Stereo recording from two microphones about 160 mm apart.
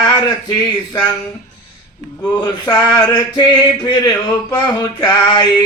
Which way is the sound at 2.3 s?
25° left (ahead or behind).